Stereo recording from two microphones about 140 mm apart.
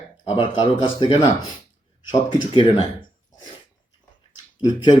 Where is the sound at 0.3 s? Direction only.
35° left (ahead or behind).